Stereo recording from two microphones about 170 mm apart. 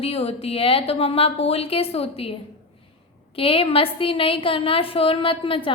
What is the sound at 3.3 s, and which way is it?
A woman's voice, 35° left (ahead or behind).